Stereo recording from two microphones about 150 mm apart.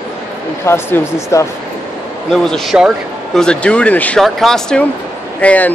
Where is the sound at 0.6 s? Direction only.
15° left (ahead or behind).